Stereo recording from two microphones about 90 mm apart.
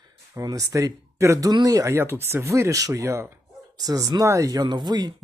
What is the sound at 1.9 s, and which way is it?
Speech, 25° right (ahead or behind).